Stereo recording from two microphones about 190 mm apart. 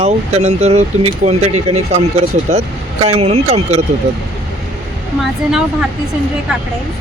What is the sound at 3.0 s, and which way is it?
Speech, 35° right (ahead or behind).